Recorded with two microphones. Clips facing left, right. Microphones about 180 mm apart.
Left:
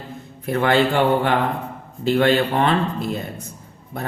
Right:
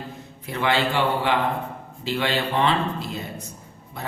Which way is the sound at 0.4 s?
55° left (ahead or behind).